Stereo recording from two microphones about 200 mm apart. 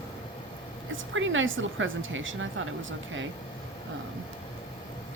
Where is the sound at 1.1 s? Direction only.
75° right (ahead or behind).